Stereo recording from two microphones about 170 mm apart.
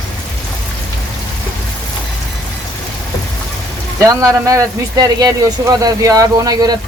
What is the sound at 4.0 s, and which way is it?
Speech, 20° right (ahead or behind).